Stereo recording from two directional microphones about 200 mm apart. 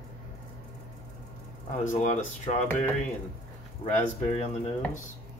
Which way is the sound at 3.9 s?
35° left (ahead or behind).